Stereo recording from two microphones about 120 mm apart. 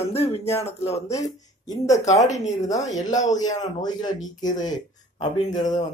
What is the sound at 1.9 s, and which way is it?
Speech, 75° left (ahead or behind).